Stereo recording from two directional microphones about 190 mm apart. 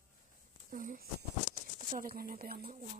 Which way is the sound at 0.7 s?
45° right (ahead or behind).